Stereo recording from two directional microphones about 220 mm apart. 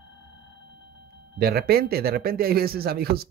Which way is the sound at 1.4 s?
45° right (ahead or behind).